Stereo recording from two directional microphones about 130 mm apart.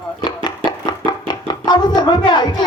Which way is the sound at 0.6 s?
35° left (ahead or behind).